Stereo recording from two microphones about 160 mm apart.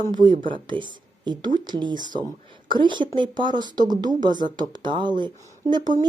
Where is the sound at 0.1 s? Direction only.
30° right (ahead or behind).